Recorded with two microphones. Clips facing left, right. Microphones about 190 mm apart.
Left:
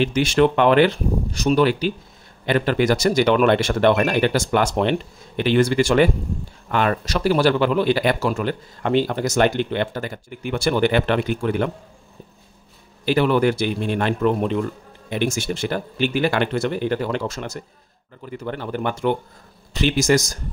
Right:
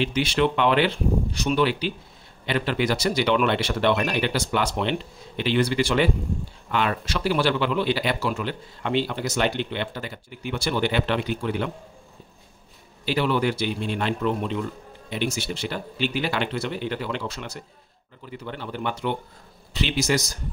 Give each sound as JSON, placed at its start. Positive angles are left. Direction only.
{"t": 0.0, "sound": "speech", "side_deg": 45}
{"t": 13.0, "sound": "speech", "side_deg": 50}